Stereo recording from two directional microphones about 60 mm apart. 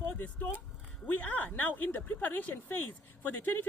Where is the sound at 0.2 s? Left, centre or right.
Left.